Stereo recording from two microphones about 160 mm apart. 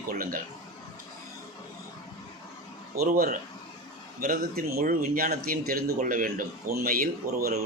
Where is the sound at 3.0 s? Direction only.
60° right (ahead or behind).